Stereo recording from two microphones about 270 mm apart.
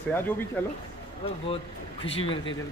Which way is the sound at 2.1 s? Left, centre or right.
Left.